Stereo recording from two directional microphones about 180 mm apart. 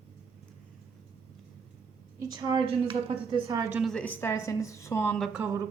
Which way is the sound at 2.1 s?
15° right (ahead or behind).